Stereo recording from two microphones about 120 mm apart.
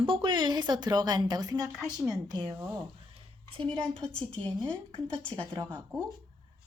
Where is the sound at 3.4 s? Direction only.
45° right (ahead or behind).